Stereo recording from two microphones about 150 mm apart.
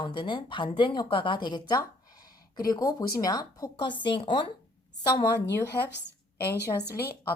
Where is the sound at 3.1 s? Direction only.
25° left (ahead or behind).